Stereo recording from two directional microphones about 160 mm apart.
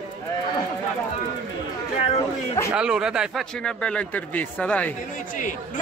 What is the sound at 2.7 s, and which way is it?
Speech, 5° right (ahead or behind).